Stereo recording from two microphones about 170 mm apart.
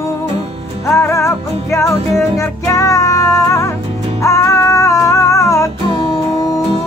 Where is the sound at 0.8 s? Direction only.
15° left (ahead or behind).